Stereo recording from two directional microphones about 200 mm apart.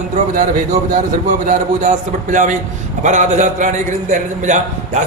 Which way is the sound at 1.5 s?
40° right (ahead or behind).